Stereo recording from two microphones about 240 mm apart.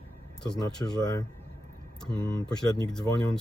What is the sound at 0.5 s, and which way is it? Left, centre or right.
Speech, centre.